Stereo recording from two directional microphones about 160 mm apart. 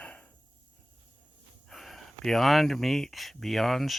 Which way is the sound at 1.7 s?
Centre (ahead or behind).